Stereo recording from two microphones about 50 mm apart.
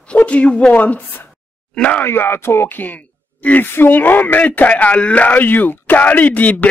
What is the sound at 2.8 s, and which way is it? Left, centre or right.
Speech, left.